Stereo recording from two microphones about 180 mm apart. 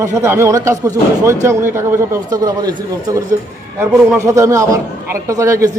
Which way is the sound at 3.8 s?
15° right (ahead or behind).